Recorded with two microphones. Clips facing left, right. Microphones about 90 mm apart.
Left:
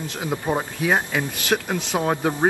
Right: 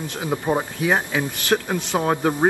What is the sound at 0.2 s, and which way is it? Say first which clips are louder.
A man's voice: right 2 dB; centre (ahead or behind).